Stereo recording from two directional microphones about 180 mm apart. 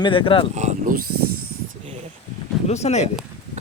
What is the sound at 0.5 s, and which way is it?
Speech, 40° right (ahead or behind).